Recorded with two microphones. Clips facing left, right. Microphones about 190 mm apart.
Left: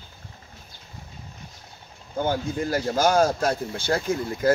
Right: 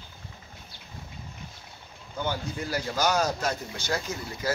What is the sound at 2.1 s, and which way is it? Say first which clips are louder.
Speech: left 6 dB; 50° left (ahead or behind).